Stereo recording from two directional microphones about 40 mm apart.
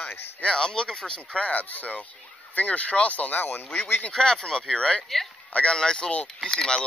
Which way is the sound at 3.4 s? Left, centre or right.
Left.